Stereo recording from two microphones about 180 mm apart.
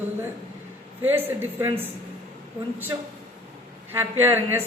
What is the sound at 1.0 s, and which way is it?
Speech, 10° right (ahead or behind).